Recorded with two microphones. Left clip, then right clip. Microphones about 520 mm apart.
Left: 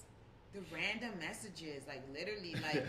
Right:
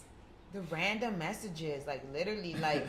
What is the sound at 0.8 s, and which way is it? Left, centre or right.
A woman's voice, right.